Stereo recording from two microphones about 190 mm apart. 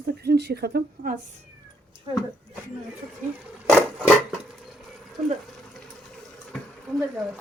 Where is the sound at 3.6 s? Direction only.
5° right (ahead or behind).